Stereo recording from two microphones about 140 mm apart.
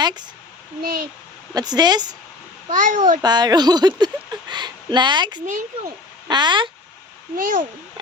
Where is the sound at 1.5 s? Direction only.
30° right (ahead or behind).